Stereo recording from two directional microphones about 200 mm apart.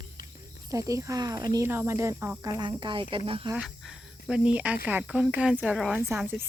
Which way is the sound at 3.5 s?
5° right (ahead or behind).